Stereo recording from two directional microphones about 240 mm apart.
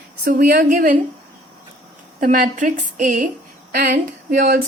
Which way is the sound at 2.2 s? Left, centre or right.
Right.